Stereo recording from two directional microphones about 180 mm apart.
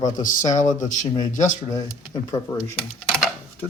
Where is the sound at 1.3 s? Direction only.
45° left (ahead or behind).